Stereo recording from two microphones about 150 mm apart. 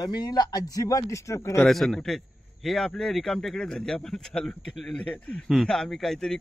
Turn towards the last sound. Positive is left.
turn(degrees=5)  # may be behind; listen again after turning